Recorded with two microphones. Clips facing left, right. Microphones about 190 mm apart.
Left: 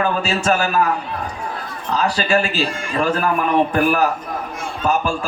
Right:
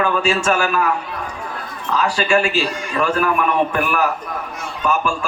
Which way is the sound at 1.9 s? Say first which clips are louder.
Right 1 dB; 35° left (ahead or behind).